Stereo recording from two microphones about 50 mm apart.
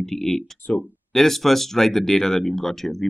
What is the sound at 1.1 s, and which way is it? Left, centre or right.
Speech, centre.